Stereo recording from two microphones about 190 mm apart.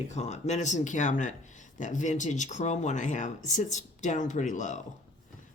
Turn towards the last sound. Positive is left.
turn(degrees=40)  # may be behind; listen again after turning